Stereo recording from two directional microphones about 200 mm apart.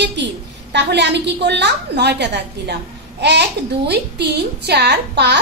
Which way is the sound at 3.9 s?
55° right (ahead or behind).